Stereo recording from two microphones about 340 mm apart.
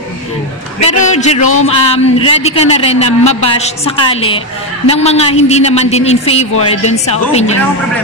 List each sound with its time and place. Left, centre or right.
0.8 s a woman's voice: centre